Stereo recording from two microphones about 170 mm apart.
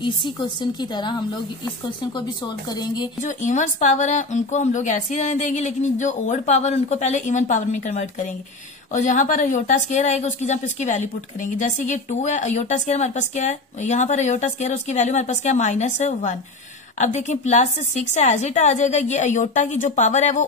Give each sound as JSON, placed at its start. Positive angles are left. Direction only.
{"t": 0.0, "sound": "speech", "side_deg": 30}
{"t": 3.2, "sound": "speech", "side_deg": 45}